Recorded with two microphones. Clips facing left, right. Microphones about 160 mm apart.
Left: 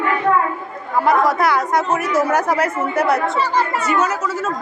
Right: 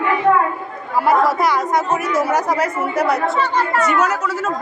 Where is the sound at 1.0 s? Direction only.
Centre (ahead or behind).